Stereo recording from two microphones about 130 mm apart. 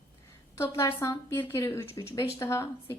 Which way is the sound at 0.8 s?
20° left (ahead or behind).